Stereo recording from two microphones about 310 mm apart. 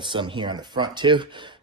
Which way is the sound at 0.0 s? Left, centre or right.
Centre.